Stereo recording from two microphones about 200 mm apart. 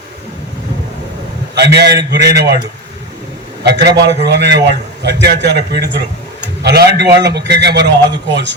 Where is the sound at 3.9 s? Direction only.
55° right (ahead or behind).